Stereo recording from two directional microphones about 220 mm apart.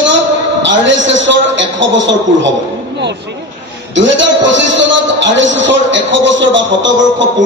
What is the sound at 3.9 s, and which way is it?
A man's voice, 55° right (ahead or behind).